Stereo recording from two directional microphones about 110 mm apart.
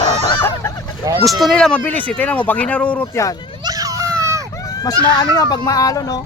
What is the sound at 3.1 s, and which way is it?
Goose, 30° left (ahead or behind).